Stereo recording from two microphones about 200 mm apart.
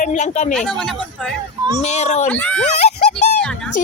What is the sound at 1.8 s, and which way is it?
Speech, 35° left (ahead or behind).